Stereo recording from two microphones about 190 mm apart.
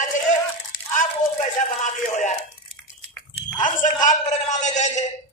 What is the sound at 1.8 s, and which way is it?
Speech, 40° left (ahead or behind).